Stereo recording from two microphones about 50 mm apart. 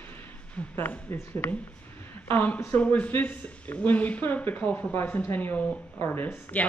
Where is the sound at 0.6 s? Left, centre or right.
Left.